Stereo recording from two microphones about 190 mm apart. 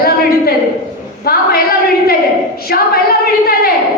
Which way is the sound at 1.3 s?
55° left (ahead or behind).